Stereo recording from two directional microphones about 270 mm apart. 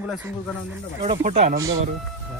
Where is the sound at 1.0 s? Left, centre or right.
Right.